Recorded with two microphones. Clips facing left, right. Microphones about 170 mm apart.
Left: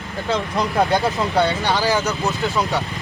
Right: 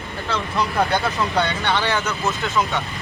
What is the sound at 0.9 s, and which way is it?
Speech, 10° left (ahead or behind).